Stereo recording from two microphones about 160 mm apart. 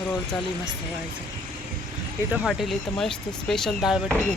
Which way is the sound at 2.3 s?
Centre (ahead or behind).